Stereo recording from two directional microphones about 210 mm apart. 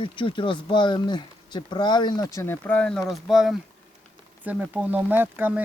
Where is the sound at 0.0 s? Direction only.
25° left (ahead or behind).